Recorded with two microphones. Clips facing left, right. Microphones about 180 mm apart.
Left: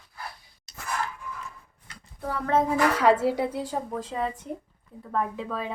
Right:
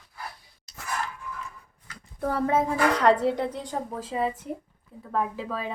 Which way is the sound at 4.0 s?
5° right (ahead or behind).